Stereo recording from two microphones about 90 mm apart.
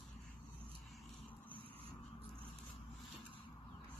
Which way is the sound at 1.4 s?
20° left (ahead or behind).